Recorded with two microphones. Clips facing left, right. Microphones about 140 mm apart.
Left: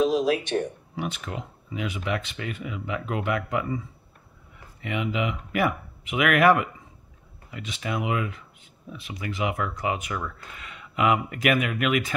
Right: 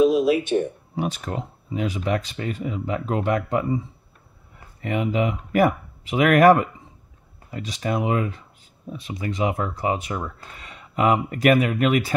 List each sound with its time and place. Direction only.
0.0 s a sound: 5° right (ahead or behind)
0.9 s speech: 40° right (ahead or behind)
4.8 s speech: 40° right (ahead or behind)